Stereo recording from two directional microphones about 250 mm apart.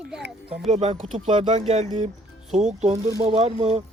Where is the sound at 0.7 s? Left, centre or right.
Right.